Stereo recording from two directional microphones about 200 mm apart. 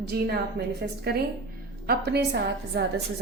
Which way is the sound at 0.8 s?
50° right (ahead or behind).